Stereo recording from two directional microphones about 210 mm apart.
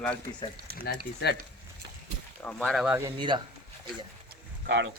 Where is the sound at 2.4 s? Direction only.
Centre (ahead or behind).